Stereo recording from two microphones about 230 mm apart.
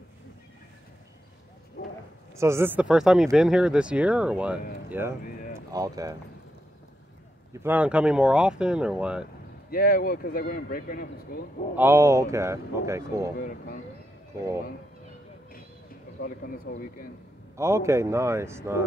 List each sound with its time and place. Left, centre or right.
2.3 s speech: centre
7.5 s speech: centre
9.7 s speech: left
11.7 s speech: centre
13.4 s speech: left
16.2 s speech: left
17.6 s speech: centre